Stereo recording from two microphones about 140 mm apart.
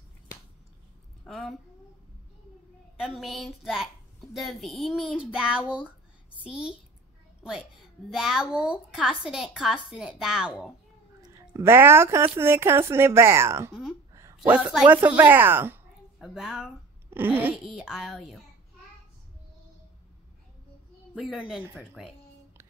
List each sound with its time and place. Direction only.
1.2 s a sound: centre (ahead or behind)
3.0 s a woman's voice: centre (ahead or behind)
8.1 s a woman's voice: 5° right (ahead or behind)
11.5 s speech: 15° right (ahead or behind)
13.7 s a woman's voice: 5° right (ahead or behind)
16.2 s a woman's voice: 5° right (ahead or behind)
17.1 s speech: 15° right (ahead or behind)
21.1 s a woman's voice: 5° right (ahead or behind)